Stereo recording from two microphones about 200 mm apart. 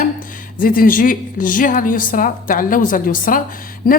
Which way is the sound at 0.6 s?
45° left (ahead or behind).